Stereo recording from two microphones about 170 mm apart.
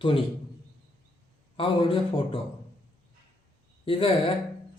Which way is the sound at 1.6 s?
30° left (ahead or behind).